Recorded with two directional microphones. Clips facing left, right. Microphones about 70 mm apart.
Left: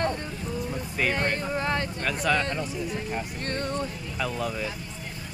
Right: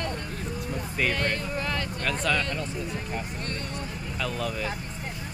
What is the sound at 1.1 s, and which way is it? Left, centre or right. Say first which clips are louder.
Speech: left 2 dB; left.